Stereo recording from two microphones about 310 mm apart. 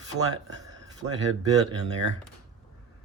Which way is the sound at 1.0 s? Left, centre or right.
Right.